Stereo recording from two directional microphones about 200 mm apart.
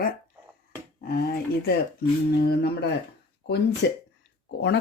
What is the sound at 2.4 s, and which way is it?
Speech, 55° left (ahead or behind).